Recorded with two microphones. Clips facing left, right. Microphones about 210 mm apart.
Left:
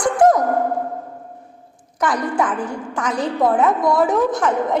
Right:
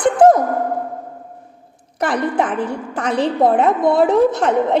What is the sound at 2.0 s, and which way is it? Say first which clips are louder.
Speech: right 2 dB; 25° right (ahead or behind).